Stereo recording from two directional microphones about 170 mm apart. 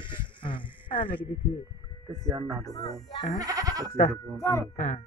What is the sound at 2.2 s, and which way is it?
Goat, 20° right (ahead or behind).